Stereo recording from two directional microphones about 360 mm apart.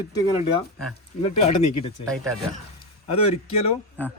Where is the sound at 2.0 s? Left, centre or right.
Centre.